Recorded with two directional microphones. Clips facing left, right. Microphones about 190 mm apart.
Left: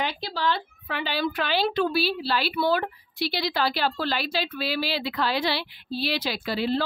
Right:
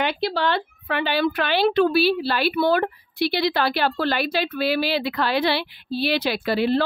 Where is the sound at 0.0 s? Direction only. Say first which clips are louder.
Right 5 dB; 65° right (ahead or behind).